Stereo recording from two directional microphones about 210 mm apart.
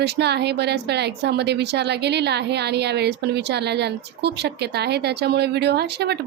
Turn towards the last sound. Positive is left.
turn(degrees=-50)  # may be behind; listen again after turning